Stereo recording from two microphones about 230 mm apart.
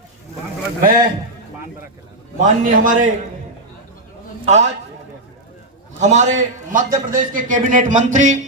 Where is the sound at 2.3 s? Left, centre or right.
Right.